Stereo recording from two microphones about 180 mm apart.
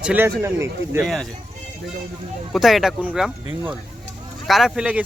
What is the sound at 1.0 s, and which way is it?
Speech, centre (ahead or behind).